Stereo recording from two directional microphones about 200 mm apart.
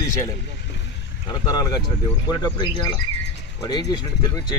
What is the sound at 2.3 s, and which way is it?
Speech, 20° left (ahead or behind).